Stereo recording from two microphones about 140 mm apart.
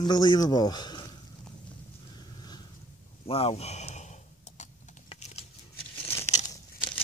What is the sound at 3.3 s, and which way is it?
Speech, 45° left (ahead or behind).